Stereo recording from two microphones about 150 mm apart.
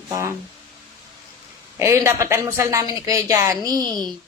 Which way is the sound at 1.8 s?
20° right (ahead or behind).